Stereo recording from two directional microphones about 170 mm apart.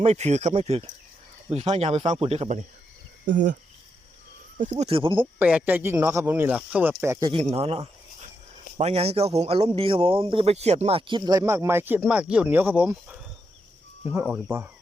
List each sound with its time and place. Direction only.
0.0 s speech: 40° right (ahead or behind)
4.5 s speech: 45° right (ahead or behind)
5.2 s speech: 10° right (ahead or behind)
7.5 s speech: 35° right (ahead or behind); by 14.7 s 10° right (ahead or behind)